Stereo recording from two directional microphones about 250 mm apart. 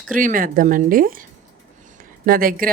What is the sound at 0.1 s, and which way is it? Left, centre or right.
Speech, right.